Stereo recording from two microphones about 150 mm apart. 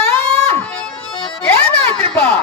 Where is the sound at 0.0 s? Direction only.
15° left (ahead or behind).